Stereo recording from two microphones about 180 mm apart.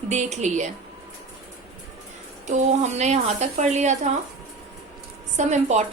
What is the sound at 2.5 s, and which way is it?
A woman's voice, 40° right (ahead or behind).